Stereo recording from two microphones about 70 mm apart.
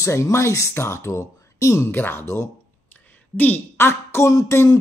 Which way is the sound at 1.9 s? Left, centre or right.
Left.